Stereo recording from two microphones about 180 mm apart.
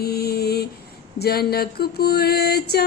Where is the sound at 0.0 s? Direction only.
60° left (ahead or behind).